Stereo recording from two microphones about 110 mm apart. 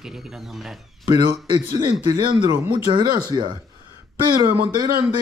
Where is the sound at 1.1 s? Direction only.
35° right (ahead or behind).